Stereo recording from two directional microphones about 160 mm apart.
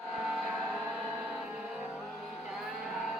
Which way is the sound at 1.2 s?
10° right (ahead or behind).